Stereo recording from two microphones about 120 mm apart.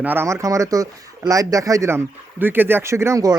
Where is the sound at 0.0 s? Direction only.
15° right (ahead or behind).